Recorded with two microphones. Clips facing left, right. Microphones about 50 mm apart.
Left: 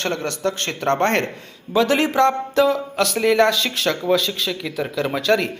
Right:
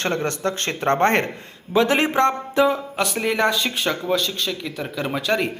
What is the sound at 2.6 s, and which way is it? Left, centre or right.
Music, centre.